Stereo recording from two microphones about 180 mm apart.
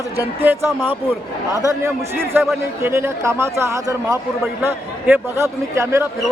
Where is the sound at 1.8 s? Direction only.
10° right (ahead or behind).